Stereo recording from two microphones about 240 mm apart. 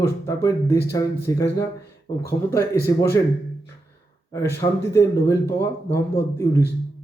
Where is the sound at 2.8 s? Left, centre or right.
Centre.